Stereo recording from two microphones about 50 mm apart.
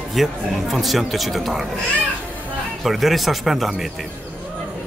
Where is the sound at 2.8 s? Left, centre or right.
Centre.